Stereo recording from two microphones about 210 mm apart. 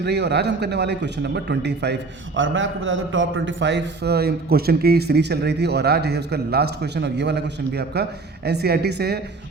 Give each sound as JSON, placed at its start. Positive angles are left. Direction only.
{"t": 0.0, "sound": "a man's voice", "side_deg": -55}